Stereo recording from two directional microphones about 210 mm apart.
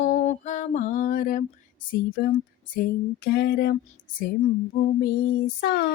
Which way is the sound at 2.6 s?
40° left (ahead or behind).